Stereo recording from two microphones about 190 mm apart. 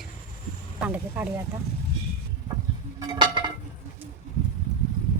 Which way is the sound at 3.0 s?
25° right (ahead or behind).